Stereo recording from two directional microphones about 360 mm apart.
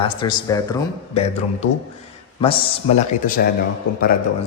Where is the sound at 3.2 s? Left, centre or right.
Left.